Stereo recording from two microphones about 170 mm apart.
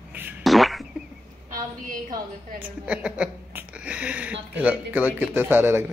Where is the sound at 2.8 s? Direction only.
5° right (ahead or behind).